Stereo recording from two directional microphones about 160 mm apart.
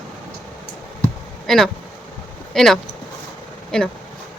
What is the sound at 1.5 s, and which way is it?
Speech, centre (ahead or behind).